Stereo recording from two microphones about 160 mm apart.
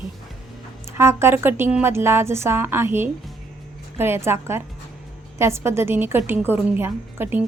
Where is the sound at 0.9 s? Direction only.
15° right (ahead or behind).